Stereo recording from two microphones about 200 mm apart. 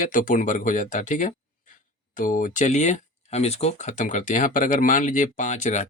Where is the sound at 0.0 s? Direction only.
40° left (ahead or behind).